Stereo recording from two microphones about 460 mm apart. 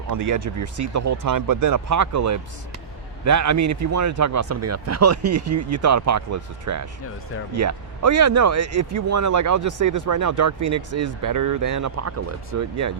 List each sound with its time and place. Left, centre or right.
0.1 s speech: right